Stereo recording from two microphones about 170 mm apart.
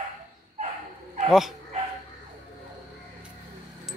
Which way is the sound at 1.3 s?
Centre (ahead or behind).